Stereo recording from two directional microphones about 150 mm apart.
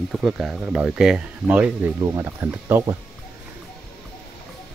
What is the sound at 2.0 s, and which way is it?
Speech, 25° right (ahead or behind).